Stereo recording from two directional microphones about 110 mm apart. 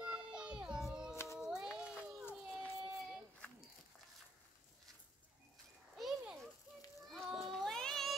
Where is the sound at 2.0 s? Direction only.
20° left (ahead or behind).